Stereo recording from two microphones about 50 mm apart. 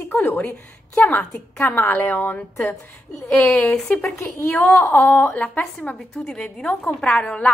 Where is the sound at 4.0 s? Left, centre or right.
Left.